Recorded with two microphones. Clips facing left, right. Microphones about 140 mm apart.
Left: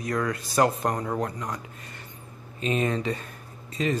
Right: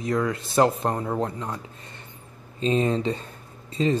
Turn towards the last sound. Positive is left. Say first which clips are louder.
# right 4 dB
turn(degrees=-30)  # may be behind; listen again after turning